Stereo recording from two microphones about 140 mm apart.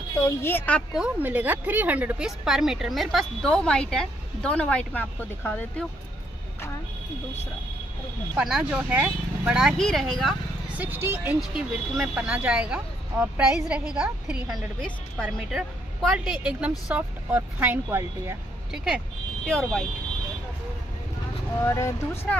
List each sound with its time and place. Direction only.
0.1 s speech: 20° left (ahead or behind)
0.9 s a woman's voice: 10° right (ahead or behind); by 5.9 s 10° left (ahead or behind)
8.4 s a woman's voice: 5° right (ahead or behind)
10.8 s a woman's voice: 15° right (ahead or behind)
19.4 s a woman's voice: 5° left (ahead or behind)
21.6 s speech: 20° left (ahead or behind)